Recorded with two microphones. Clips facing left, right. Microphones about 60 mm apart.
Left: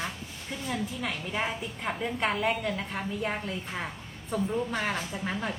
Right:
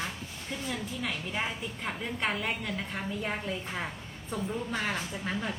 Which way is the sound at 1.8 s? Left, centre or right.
Centre.